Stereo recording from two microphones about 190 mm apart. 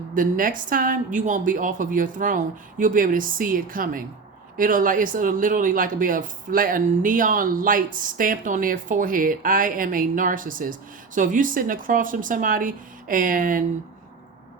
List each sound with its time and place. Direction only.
0.1 s speech: 45° right (ahead or behind)